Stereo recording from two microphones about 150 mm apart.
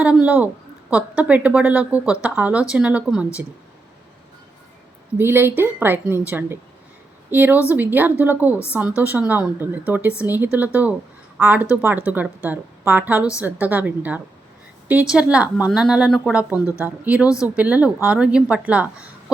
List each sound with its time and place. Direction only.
0.3 s a woman's voice: 10° right (ahead or behind)
5.1 s a woman's voice: 15° right (ahead or behind)
17.2 s speech: 20° left (ahead or behind)
17.6 s a woman's voice: 10° right (ahead or behind)